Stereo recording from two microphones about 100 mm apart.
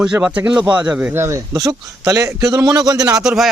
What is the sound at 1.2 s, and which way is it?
A man's voice, 30° right (ahead or behind).